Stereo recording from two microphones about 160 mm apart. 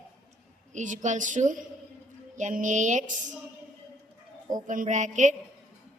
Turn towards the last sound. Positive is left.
turn(degrees=-50)  # may be behind; listen again after turning